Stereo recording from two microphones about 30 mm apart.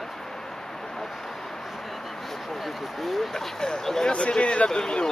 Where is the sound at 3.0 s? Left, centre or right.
Centre.